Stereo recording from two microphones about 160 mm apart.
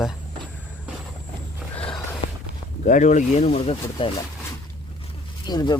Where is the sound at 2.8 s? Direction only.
50° left (ahead or behind).